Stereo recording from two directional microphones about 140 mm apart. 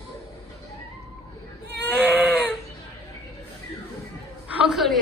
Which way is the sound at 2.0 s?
10° right (ahead or behind).